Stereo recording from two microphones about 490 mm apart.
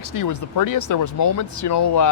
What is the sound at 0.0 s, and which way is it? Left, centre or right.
Speech, left.